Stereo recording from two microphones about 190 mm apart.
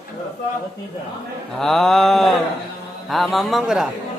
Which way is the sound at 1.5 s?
Centre (ahead or behind).